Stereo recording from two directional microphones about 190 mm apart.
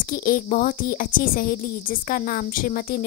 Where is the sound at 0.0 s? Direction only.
45° left (ahead or behind).